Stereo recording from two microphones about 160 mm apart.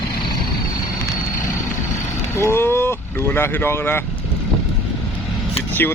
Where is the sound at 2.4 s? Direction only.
15° left (ahead or behind).